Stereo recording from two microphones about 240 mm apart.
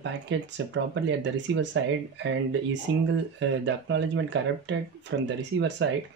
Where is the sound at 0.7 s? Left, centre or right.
Right.